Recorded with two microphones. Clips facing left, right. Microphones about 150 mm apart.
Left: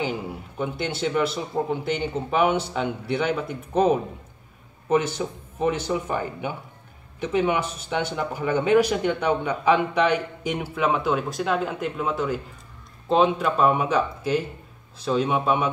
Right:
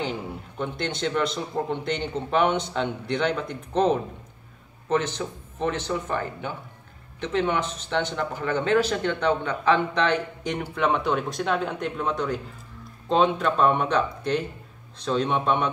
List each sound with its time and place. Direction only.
0.0 s a man's voice: 5° left (ahead or behind)